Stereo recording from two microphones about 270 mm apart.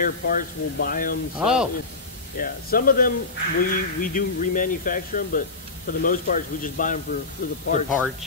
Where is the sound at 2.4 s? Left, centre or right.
Left.